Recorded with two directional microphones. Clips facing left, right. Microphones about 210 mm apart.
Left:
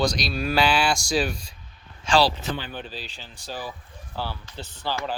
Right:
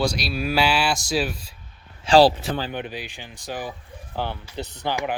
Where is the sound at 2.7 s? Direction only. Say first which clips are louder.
Right 5 dB; 15° right (ahead or behind).